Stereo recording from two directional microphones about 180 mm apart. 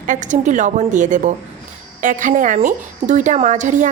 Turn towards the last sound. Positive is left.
turn(degrees=-45)  # may be behind; listen again after turning